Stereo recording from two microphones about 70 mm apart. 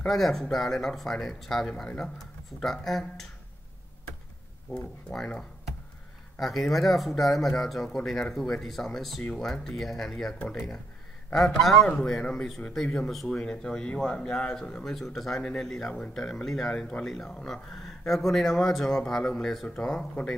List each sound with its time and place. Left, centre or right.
0.0 s speech: centre
4.6 s speech: centre
6.4 s speech: centre
11.6 s speech: centre